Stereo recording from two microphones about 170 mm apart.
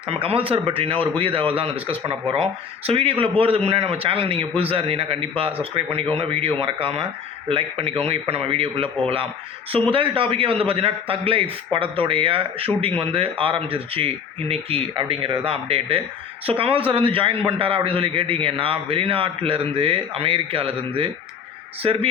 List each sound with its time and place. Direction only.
0.1 s a man's voice: 35° right (ahead or behind)